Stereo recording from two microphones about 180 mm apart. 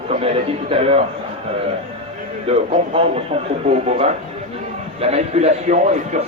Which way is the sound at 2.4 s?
35° right (ahead or behind).